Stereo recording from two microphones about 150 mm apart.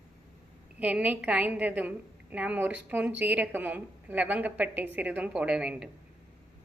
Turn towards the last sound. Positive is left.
turn(degrees=-5)  # may be behind; listen again after turning